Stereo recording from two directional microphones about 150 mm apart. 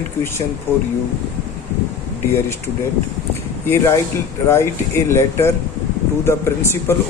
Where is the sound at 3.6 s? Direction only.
15° left (ahead or behind).